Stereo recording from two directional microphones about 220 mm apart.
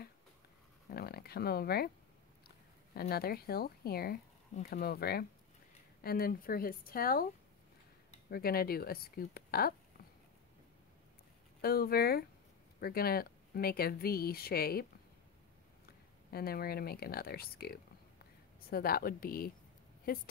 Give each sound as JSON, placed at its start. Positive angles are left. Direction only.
{"t": 0.8, "sound": "speech", "side_deg": 45}
{"t": 8.3, "sound": "speech", "side_deg": 45}
{"t": 11.6, "sound": "speech", "side_deg": 45}
{"t": 16.3, "sound": "speech", "side_deg": 45}